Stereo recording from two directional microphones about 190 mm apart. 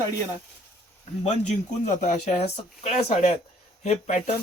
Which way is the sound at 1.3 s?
40° left (ahead or behind).